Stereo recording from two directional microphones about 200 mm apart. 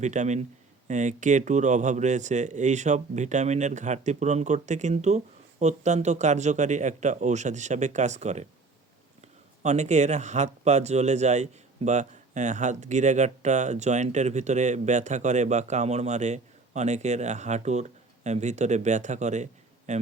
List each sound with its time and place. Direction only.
0.0 s speech: 35° right (ahead or behind)
9.6 s speech: 35° right (ahead or behind)